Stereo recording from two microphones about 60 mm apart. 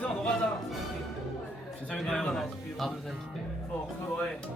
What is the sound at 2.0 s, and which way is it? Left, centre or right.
Speech, centre.